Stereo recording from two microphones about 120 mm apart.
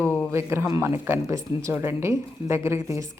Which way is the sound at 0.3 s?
20° right (ahead or behind).